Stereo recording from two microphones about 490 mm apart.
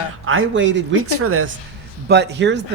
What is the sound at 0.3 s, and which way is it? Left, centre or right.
A man's voice, right.